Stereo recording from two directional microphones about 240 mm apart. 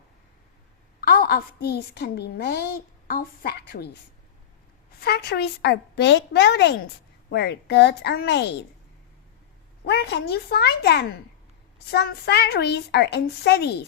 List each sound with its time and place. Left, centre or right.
1.0 s a woman's voice: left
4.9 s a woman's voice: left
9.8 s a woman's voice: left